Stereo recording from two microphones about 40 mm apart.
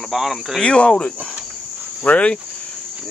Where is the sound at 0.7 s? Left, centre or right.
Left.